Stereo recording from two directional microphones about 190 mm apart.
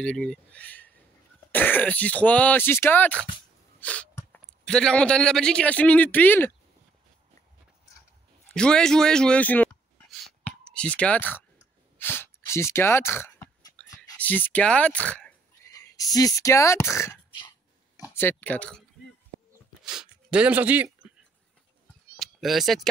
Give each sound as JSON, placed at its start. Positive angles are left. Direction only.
{"t": 0.0, "sound": "speech", "side_deg": 5}
{"t": 3.8, "sound": "sneeze", "side_deg": 5}
{"t": 4.4, "sound": "a man's voice", "side_deg": 5}
{"t": 8.5, "sound": "a man's voice", "side_deg": 5}
{"t": 10.2, "sound": "clicking", "side_deg": 5}
{"t": 12.0, "sound": "a sound", "side_deg": 10}
{"t": 14.1, "sound": "speech", "side_deg": 10}
{"t": 15.7, "sound": "speech", "side_deg": 20}
{"t": 19.8, "sound": "a sound", "side_deg": -5}
{"t": 22.1, "sound": "cat", "side_deg": 0}